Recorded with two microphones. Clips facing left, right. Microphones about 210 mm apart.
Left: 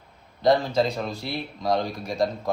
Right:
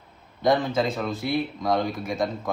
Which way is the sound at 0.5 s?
50° right (ahead or behind).